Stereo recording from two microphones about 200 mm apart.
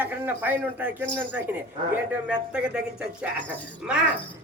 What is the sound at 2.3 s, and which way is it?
Speech, 5° right (ahead or behind).